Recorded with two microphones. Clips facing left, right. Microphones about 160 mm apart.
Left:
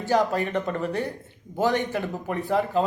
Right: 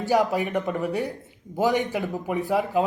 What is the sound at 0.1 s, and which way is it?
A man's voice, 15° right (ahead or behind).